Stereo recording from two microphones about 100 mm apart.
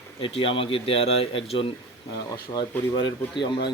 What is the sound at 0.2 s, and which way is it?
Speech, 65° left (ahead or behind).